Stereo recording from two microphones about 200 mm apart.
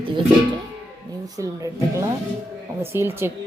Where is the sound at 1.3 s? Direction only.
15° right (ahead or behind).